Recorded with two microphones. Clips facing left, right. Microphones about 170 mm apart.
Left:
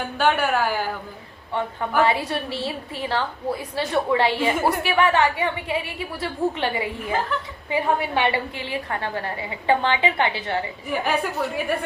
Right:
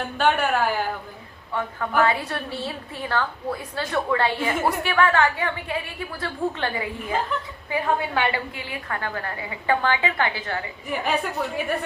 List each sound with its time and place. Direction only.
0.0 s a woman's voice: 5° left (ahead or behind)
2.0 s a woman's voice: 20° left (ahead or behind)
10.8 s a woman's voice: centre (ahead or behind)